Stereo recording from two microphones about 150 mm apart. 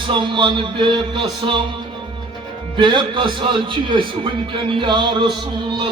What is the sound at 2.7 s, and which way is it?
A man's voice, 35° right (ahead or behind).